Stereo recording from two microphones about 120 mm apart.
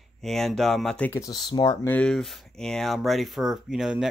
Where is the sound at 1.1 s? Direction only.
30° left (ahead or behind).